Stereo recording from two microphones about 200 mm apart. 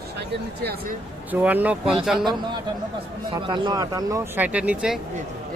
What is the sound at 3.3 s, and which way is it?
Speech, 20° right (ahead or behind).